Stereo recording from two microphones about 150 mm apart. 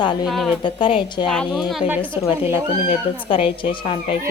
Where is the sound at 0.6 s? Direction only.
35° left (ahead or behind).